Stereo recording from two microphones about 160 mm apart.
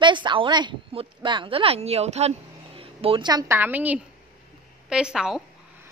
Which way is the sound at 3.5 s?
10° right (ahead or behind).